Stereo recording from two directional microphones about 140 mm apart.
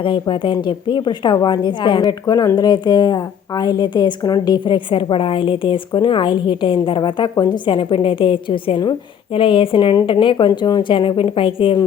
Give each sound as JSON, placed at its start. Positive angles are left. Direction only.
{"t": 0.0, "sound": "a woman's voice", "side_deg": 35}